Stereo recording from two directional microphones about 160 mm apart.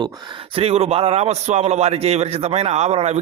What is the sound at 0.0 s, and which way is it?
A man's voice, 25° right (ahead or behind).